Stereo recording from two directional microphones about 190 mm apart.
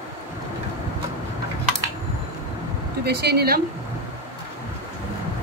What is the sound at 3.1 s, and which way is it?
Speech, 55° right (ahead or behind).